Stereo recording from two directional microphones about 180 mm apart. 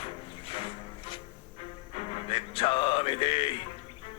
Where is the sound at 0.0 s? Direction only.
30° left (ahead or behind).